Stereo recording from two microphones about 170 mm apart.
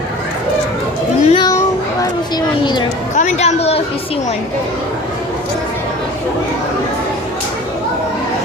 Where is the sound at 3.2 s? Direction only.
40° left (ahead or behind).